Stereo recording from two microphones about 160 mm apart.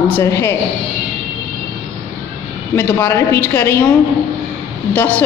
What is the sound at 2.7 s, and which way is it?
A woman's voice, 15° left (ahead or behind).